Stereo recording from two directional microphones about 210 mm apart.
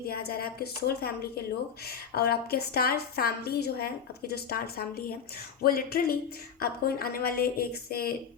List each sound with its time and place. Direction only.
0.1 s a woman's voice: 45° left (ahead or behind)